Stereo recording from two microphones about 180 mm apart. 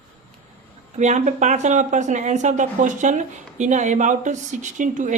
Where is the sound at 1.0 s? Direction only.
40° right (ahead or behind).